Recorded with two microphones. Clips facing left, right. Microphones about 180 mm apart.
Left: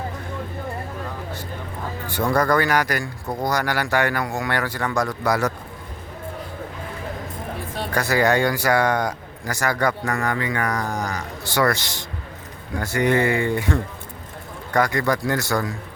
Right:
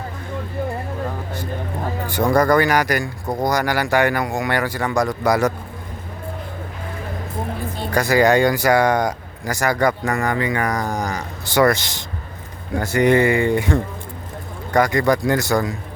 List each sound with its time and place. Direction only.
2.0 s speech: 15° right (ahead or behind)
7.9 s speech: 15° right (ahead or behind)
14.7 s speech: 15° right (ahead or behind)